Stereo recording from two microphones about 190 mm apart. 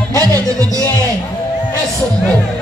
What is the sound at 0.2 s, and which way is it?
Music, 20° right (ahead or behind).